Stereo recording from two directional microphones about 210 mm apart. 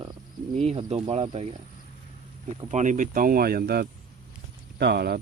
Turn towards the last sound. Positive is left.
turn(degrees=-50)  # may be behind; listen again after turning